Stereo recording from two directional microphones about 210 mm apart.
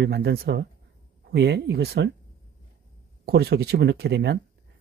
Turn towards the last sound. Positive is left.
turn(degrees=-55)  # may be behind; listen again after turning